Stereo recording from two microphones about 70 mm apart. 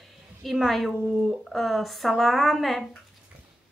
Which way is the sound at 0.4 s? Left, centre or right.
Centre.